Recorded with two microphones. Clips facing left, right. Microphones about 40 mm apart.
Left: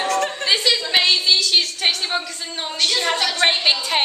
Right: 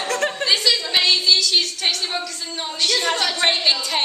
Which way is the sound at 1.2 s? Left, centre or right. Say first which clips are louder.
Even; centre.